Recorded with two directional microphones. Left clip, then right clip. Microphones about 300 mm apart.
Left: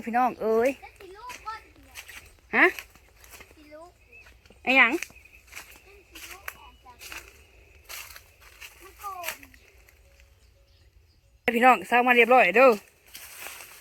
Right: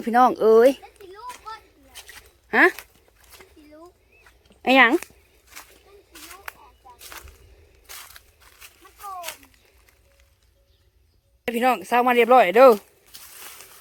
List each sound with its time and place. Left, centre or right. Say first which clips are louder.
0.0 s speech: right 8 dB; centre
2.5 s speech: right 4 dB; centre
4.6 s speech: right 4 dB; centre
11.4 s speech: left 2 dB; centre